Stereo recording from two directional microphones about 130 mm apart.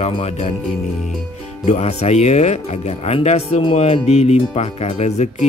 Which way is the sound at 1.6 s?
55° left (ahead or behind).